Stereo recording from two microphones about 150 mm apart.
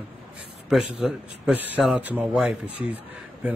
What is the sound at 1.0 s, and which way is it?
Speech, 5° right (ahead or behind).